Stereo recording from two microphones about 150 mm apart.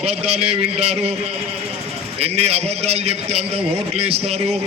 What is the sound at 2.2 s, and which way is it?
A man's voice, 45° right (ahead or behind).